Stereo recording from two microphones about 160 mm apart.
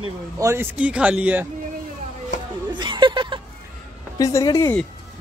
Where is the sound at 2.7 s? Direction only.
30° right (ahead or behind).